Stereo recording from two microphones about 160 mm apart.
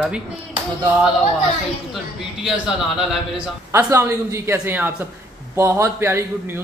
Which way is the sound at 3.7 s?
15° right (ahead or behind).